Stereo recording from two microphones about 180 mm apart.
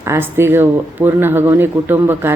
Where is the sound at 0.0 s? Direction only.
15° right (ahead or behind).